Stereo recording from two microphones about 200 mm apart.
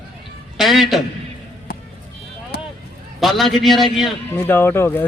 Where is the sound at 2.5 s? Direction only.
55° left (ahead or behind).